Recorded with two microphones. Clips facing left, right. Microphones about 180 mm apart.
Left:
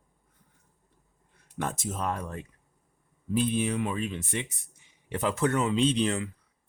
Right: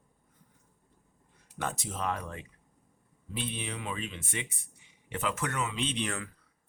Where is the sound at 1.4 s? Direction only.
50° left (ahead or behind).